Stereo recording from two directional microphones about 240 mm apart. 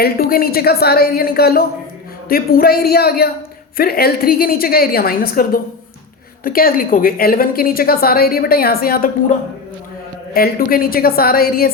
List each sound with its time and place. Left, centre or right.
0.0 s a woman's voice: left
10.3 s a woman's voice: left